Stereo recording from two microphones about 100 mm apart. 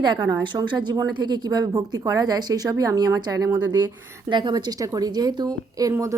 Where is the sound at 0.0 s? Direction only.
50° right (ahead or behind).